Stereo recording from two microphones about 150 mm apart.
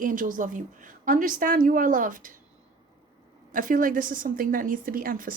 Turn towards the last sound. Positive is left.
turn(degrees=-70)  # may be behind; listen again after turning